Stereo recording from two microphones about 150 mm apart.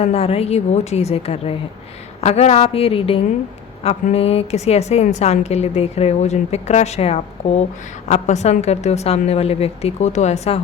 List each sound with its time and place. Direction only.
0.0 s a woman's voice: 40° left (ahead or behind)